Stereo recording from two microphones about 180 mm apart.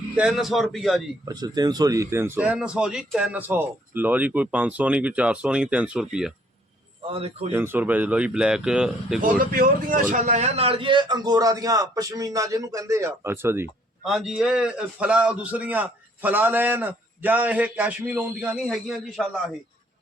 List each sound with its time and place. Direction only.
0.2 s speech: 5° right (ahead or behind)
1.2 s a man's voice: 20° right (ahead or behind); by 6.3 s 5° right (ahead or behind)
7.1 s a man's voice: 35° right (ahead or behind)
7.5 s speech: 10° right (ahead or behind)
9.2 s a man's voice: 50° right (ahead or behind); by 13.7 s 15° right (ahead or behind)
14.0 s a man's voice: 5° right (ahead or behind)